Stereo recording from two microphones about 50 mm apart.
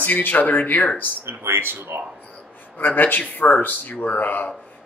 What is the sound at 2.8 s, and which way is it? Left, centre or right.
Speech, left.